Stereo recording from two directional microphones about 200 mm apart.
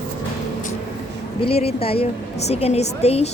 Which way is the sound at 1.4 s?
30° left (ahead or behind).